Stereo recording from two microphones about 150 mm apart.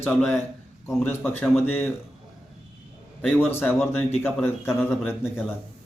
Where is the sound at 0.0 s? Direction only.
10° left (ahead or behind).